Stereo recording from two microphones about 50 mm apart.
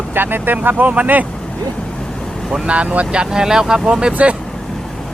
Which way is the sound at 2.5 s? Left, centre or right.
Right.